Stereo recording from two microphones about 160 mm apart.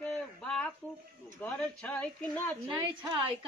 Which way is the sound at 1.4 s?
10° left (ahead or behind).